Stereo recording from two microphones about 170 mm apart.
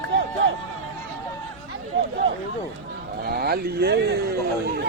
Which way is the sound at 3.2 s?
65° right (ahead or behind).